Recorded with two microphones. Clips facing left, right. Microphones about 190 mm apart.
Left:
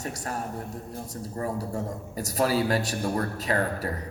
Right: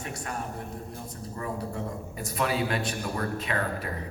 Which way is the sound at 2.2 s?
40° left (ahead or behind).